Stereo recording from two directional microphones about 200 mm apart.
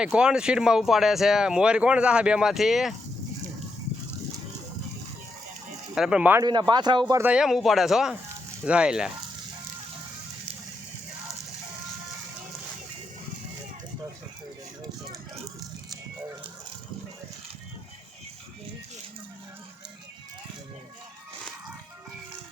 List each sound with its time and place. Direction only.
0.0 s speech: 5° right (ahead or behind)
5.9 s speech: 5° right (ahead or behind)
6.4 s speech: 20° right (ahead or behind)
7.2 s speech: 5° right (ahead or behind)